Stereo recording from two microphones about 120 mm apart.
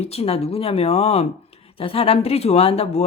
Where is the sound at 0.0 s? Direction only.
60° left (ahead or behind).